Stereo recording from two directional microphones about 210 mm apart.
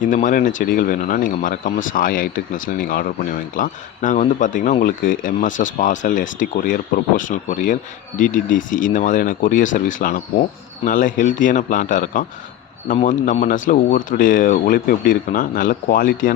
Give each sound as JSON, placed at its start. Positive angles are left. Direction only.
{"t": 0.0, "sound": "speech", "side_deg": 40}